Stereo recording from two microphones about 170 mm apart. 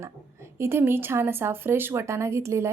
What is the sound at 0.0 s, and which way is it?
A woman's voice, 15° right (ahead or behind).